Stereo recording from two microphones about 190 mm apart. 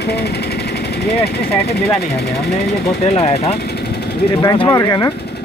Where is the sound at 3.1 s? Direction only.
30° left (ahead or behind).